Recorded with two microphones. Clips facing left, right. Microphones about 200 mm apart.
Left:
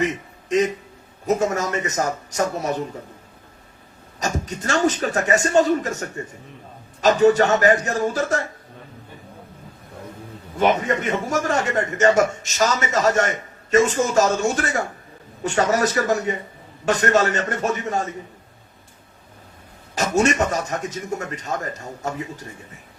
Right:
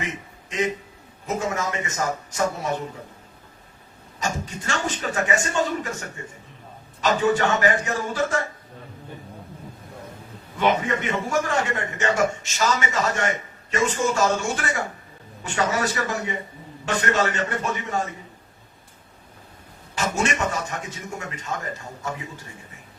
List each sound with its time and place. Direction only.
0.4 s a man's voice: 40° left (ahead or behind)
4.2 s a man's voice: 40° left (ahead or behind)
10.6 s a man's voice: 40° left (ahead or behind)
20.0 s a man's voice: 40° left (ahead or behind)